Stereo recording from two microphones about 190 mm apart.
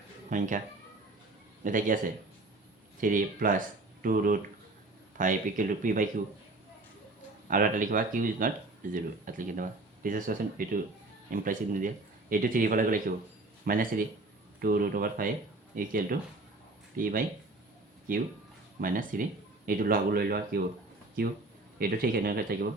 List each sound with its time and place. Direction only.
0.3 s speech: 45° right (ahead or behind)
1.6 s speech: 45° right (ahead or behind)
3.0 s speech: 45° right (ahead or behind)
7.4 s speech: 45° right (ahead or behind)
21.8 s speech: 50° right (ahead or behind)